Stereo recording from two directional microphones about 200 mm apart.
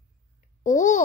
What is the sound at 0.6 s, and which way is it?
Speech, 40° left (ahead or behind).